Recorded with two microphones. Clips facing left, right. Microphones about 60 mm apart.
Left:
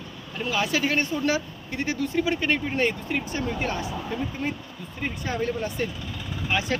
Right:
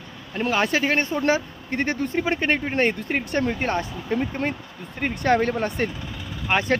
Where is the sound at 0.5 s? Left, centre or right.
Right.